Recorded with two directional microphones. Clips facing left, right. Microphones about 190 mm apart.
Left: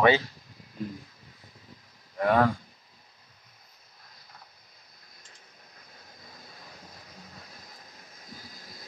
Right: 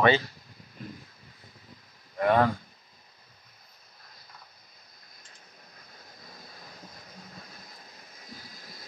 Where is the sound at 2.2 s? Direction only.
Centre (ahead or behind).